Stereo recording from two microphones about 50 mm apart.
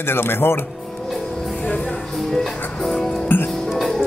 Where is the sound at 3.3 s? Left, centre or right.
Left.